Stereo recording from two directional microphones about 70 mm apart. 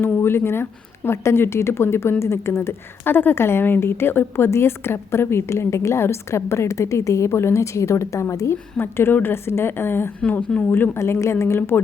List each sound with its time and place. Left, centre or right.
0.2 s speech: left
8.8 s speech: left
10.2 s speech: centre
10.7 s speech: left